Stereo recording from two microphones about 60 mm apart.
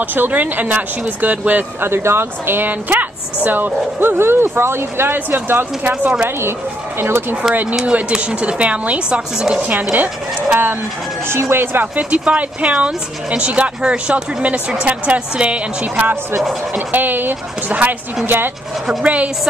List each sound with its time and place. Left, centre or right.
0.0 s speech: right
1.9 s speech: right
7.0 s speech: right
7.8 s speech: centre; by 11.9 s right
11.9 s speech: right
18.2 s speech: right
19.0 s speech: right